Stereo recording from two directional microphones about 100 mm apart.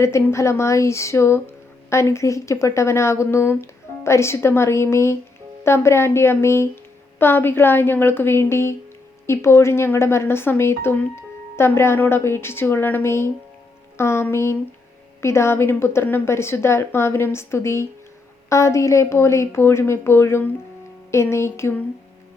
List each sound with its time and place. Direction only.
0.0 s speech: 25° left (ahead or behind)